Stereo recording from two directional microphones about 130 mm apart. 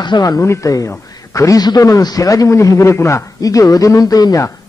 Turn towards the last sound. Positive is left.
turn(degrees=30)  # may be behind; listen again after turning